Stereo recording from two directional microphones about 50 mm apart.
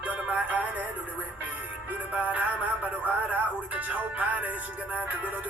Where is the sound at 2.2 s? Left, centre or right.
Right.